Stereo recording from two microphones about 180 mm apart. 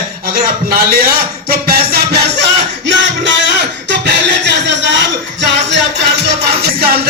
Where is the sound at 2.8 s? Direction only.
85° right.